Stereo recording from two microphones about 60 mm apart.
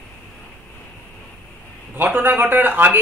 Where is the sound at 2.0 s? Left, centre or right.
Right.